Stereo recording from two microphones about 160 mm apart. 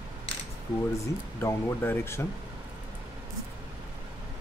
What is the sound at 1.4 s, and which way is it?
Speech, 15° left (ahead or behind).